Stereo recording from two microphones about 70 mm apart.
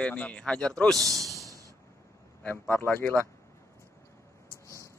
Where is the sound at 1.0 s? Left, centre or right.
Right.